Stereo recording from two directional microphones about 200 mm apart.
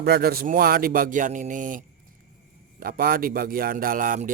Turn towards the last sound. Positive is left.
turn(degrees=-40)  # may be behind; listen again after turning